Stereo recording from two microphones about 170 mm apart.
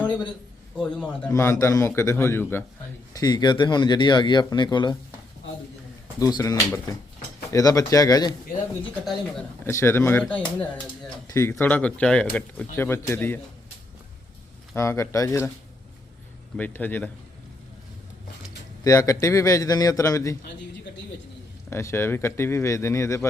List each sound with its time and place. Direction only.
0.8 s a man's voice: centre (ahead or behind)
1.3 s speech: 15° left (ahead or behind)
6.1 s speech: 20° left (ahead or behind)
9.6 s speech: 15° left (ahead or behind)
14.8 s speech: 15° left (ahead or behind)
16.6 s speech: 10° left (ahead or behind)
18.9 s speech: 20° left (ahead or behind)
21.7 s speech: 15° left (ahead or behind)